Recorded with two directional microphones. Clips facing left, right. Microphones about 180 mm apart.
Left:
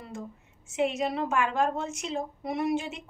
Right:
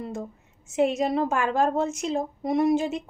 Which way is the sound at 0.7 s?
40° right (ahead or behind).